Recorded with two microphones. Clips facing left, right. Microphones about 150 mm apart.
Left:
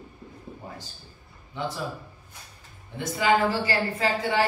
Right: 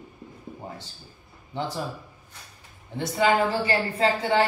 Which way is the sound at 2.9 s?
30° right (ahead or behind).